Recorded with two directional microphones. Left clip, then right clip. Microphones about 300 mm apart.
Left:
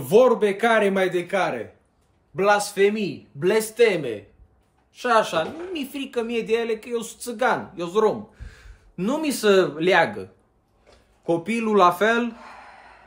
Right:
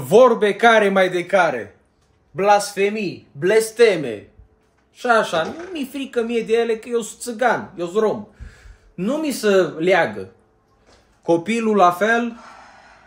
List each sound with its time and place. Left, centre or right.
0.1 s speech: centre
5.3 s speech: centre
11.2 s speech: centre
12.4 s a sound: left